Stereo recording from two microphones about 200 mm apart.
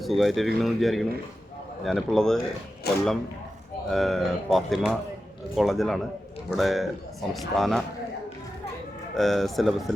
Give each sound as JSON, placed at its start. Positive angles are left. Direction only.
{"t": 0.0, "sound": "speech", "side_deg": 0}
{"t": 2.9, "sound": "speech", "side_deg": 55}
{"t": 3.8, "sound": "speech", "side_deg": 0}
{"t": 9.1, "sound": "speech", "side_deg": 0}